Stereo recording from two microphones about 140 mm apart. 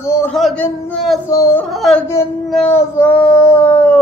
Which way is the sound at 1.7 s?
Centre (ahead or behind).